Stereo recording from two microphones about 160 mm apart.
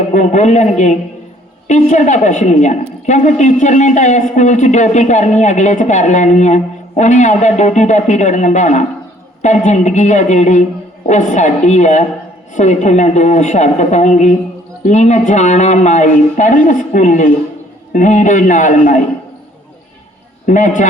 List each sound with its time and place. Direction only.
0.1 s a woman's voice: 50° left (ahead or behind)
20.5 s a woman's voice: 50° left (ahead or behind)